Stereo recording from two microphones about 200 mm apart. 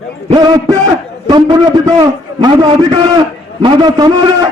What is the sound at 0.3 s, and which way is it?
A man's voice, 20° right (ahead or behind).